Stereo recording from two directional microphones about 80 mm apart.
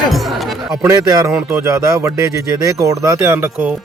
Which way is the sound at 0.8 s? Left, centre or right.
Right.